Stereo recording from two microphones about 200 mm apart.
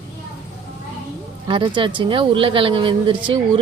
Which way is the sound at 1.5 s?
25° right (ahead or behind).